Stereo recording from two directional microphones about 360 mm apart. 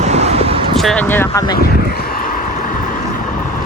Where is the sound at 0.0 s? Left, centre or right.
Centre.